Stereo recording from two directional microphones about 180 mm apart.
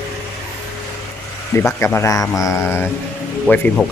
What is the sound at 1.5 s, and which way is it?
Speech, 10° left (ahead or behind).